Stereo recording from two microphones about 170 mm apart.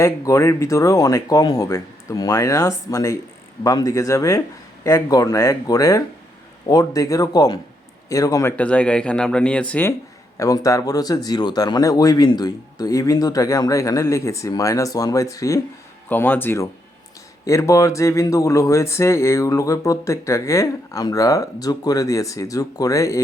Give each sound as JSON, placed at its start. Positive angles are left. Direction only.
{"t": 0.0, "sound": "speech", "side_deg": 15}
{"t": 10.3, "sound": "speech", "side_deg": 20}